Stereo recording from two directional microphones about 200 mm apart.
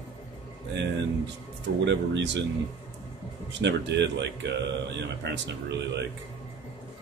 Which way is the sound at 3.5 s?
60° right (ahead or behind).